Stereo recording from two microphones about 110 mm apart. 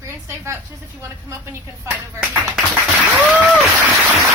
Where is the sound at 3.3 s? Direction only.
15° right (ahead or behind).